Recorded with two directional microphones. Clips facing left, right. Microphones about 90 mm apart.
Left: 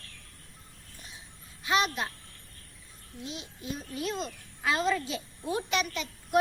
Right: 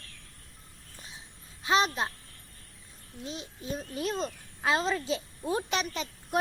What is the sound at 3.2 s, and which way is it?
A child's voice, 35° right (ahead or behind).